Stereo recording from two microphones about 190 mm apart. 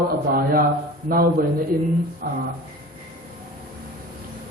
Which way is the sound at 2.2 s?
50° right (ahead or behind).